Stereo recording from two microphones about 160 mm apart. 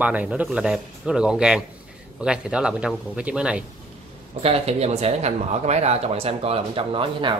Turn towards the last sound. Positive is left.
turn(degrees=-30)  # may be behind; listen again after turning